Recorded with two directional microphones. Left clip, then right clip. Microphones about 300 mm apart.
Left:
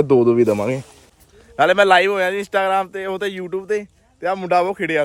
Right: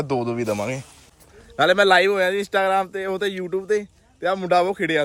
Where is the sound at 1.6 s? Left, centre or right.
Centre.